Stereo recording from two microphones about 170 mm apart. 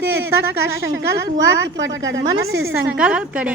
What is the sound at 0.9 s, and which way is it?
A woman's voice, 90° right.